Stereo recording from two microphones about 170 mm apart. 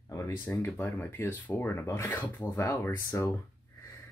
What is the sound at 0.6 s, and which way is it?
Speech, 10° left (ahead or behind).